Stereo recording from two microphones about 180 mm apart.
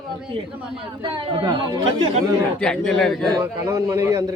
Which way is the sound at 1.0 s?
30° right (ahead or behind).